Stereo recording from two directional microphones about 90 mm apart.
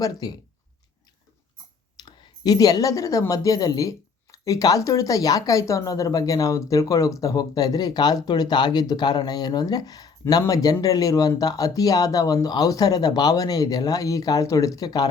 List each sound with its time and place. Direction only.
0.0 s speech: 50° left (ahead or behind)
2.0 s speech: 50° left (ahead or behind)